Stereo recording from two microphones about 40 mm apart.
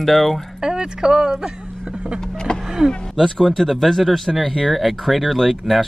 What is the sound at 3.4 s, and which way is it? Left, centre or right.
Speech, centre.